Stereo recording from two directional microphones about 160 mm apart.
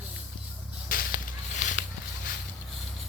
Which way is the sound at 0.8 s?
65° left (ahead or behind).